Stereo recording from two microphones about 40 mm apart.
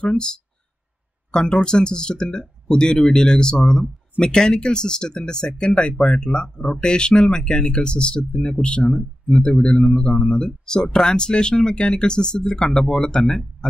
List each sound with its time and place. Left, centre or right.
0.0 s speech: left